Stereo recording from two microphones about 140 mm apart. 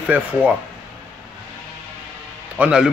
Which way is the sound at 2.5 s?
10° right (ahead or behind).